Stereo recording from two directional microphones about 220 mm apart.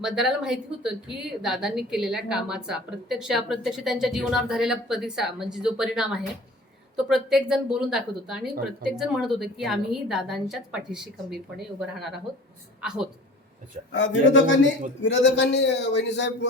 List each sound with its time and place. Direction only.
0.0 s a woman's voice: centre (ahead or behind)
13.9 s a man's voice: 55° left (ahead or behind)